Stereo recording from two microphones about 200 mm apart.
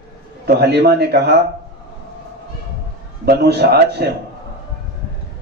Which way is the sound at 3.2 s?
55° right (ahead or behind).